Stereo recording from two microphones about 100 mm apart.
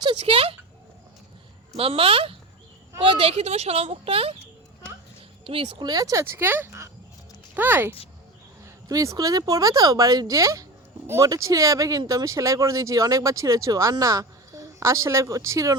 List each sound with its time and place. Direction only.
0.2 s speech: 75° right (ahead or behind)
1.7 s speech: 75° right (ahead or behind)
5.5 s speech: 65° right (ahead or behind)
5.9 s speech: 35° right (ahead or behind); by 7.9 s 20° right (ahead or behind)
8.6 s speech: 35° right (ahead or behind)